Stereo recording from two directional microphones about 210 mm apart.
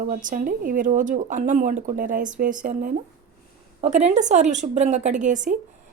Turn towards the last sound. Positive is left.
turn(degrees=-35)  # may be behind; listen again after turning